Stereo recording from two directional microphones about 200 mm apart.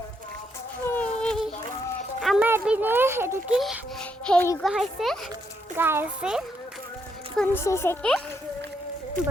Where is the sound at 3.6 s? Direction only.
Centre (ahead or behind).